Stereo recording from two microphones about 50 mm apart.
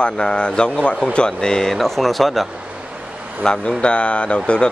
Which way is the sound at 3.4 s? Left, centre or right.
Centre.